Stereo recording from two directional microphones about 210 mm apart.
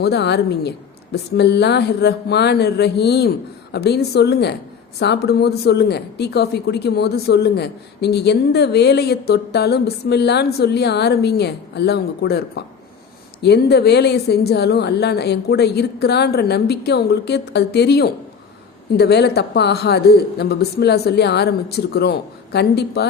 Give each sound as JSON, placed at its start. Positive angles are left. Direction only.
{"t": 0.0, "sound": "a woman's voice", "side_deg": 50}